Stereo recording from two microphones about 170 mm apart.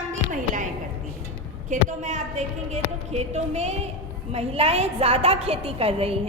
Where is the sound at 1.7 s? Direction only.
45° right (ahead or behind).